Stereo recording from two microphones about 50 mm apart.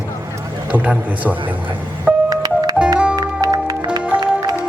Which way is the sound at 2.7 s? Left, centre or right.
Right.